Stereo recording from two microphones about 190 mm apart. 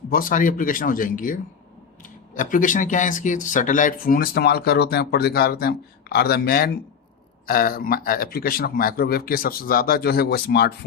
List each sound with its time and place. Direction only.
0.1 s speech: 50° left (ahead or behind)
2.4 s speech: 45° left (ahead or behind); by 10.8 s 60° left (ahead or behind)